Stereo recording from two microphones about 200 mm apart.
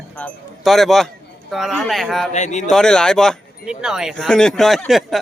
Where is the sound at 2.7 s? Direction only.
5° left (ahead or behind).